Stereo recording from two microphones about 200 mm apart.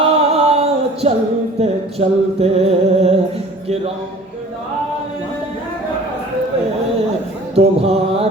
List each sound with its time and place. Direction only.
0.0 s a sound: 30° right (ahead or behind)
1.0 s music: 30° right (ahead or behind)
7.5 s music: 30° right (ahead or behind)